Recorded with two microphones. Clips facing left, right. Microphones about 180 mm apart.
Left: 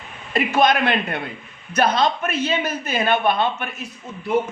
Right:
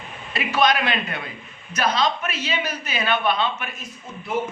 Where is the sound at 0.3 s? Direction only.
50° left (ahead or behind).